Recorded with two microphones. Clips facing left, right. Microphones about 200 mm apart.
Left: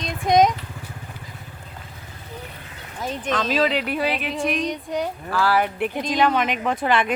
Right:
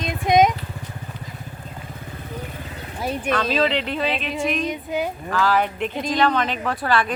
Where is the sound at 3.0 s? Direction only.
10° right (ahead or behind).